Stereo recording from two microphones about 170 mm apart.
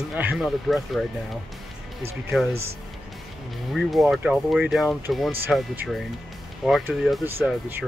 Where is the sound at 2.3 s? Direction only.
Centre (ahead or behind).